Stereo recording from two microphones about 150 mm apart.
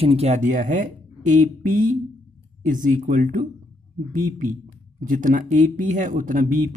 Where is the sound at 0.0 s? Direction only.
45° right (ahead or behind).